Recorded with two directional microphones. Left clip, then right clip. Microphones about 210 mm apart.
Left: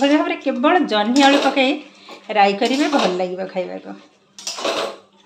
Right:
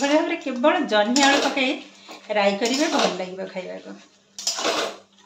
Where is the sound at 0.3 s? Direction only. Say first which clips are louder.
Left 4 dB; 40° left (ahead or behind).